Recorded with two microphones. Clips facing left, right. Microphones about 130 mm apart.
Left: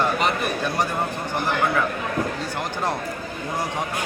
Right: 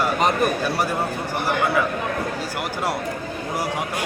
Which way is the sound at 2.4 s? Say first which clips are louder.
Right 1 dB; 10° right (ahead or behind).